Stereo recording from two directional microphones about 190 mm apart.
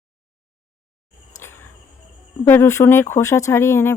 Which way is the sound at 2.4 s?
10° left (ahead or behind).